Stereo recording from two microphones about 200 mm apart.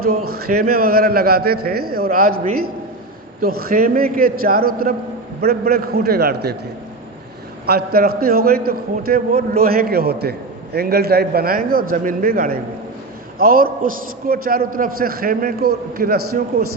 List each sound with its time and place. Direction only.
0.3 s a man's voice: 50° right (ahead or behind)
3.4 s a man's voice: 50° right (ahead or behind)
7.7 s a man's voice: 50° right (ahead or behind)